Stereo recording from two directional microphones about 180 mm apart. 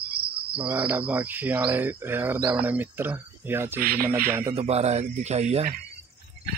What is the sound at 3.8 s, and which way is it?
Speech, 55° right (ahead or behind).